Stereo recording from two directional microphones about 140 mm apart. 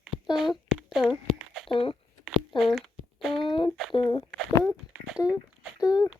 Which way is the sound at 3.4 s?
35° left (ahead or behind).